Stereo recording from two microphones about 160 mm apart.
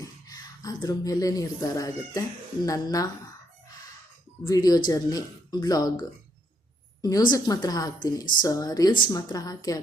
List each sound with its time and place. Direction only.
0.0 s speech: 25° left (ahead or behind)
4.4 s speech: 25° left (ahead or behind)